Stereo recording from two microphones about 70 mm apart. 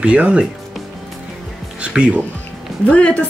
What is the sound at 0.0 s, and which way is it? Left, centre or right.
Speech, centre.